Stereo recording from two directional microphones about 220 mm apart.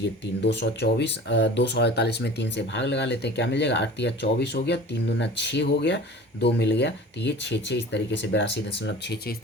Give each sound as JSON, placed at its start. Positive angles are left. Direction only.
{"t": 0.4, "sound": "speech", "side_deg": 50}